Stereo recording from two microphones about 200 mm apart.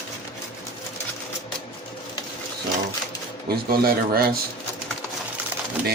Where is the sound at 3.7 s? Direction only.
50° right (ahead or behind).